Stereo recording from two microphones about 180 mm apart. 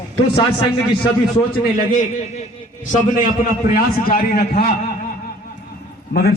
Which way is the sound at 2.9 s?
45° left (ahead or behind).